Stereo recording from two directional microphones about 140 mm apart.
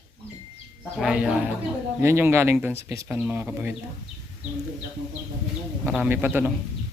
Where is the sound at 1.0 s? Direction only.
5° right (ahead or behind).